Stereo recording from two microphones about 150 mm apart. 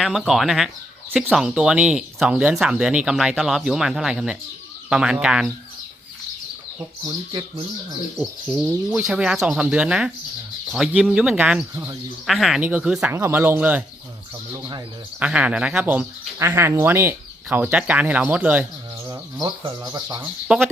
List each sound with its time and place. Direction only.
0.0 s speech: centre (ahead or behind)
7.3 s speech: 30° right (ahead or behind)
8.9 s speech: centre (ahead or behind)
15.2 s speech: 5° right (ahead or behind)
19.5 s speech: 30° right (ahead or behind)
20.5 s speech: 5° right (ahead or behind)